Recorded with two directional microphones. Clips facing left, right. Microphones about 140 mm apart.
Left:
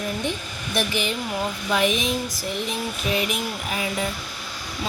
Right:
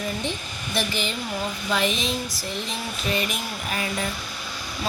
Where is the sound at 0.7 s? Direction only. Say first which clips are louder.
Left 2 dB; 10° left (ahead or behind).